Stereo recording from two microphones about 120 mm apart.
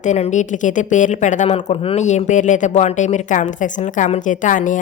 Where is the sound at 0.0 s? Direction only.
85° left; by 2.0 s 55° left (ahead or behind).